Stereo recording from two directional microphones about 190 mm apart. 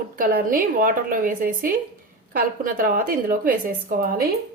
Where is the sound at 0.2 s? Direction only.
50° right (ahead or behind).